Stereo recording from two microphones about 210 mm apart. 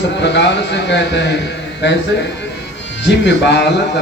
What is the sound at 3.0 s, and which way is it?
Speech, 55° left (ahead or behind).